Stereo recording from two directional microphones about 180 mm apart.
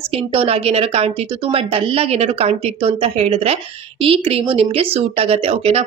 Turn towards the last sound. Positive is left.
turn(degrees=-35)  # may be behind; listen again after turning